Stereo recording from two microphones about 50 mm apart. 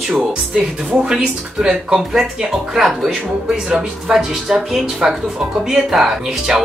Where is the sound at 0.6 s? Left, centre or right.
Centre.